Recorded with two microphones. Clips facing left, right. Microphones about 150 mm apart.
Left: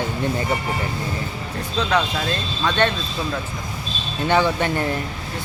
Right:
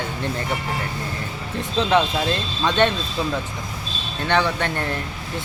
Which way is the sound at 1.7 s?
25° right (ahead or behind).